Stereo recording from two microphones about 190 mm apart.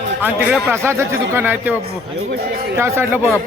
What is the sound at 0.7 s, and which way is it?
A man's voice, 15° right (ahead or behind).